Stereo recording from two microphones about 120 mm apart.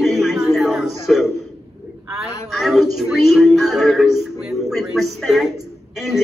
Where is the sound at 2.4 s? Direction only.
Centre (ahead or behind).